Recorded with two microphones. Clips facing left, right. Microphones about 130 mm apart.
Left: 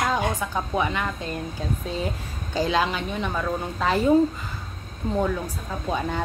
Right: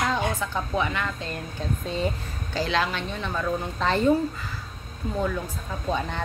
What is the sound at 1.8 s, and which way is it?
Speech, centre (ahead or behind).